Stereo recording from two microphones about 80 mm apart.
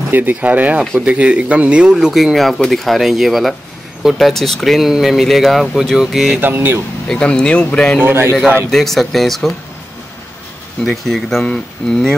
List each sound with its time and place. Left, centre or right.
0.1 s speech: right; by 6.4 s centre
6.4 s speech: right
7.1 s speech: centre
8.0 s a man's voice: right
8.6 s speech: centre
11.1 s speech: centre